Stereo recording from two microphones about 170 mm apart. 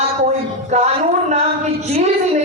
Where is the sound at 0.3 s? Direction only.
45° right (ahead or behind).